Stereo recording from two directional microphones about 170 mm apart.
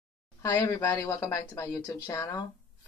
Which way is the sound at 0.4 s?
20° left (ahead or behind).